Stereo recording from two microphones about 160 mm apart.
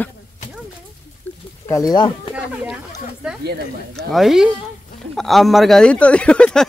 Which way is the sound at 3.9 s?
Centre (ahead or behind).